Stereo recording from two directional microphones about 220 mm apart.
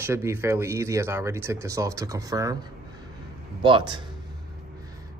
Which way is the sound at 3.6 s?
20° right (ahead or behind).